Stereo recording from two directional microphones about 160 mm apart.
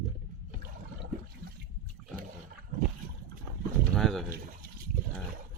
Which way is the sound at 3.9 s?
Centre (ahead or behind).